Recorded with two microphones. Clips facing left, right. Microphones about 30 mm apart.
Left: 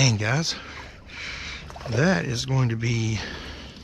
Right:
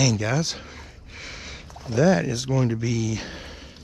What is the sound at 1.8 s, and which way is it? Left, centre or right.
Speech, left.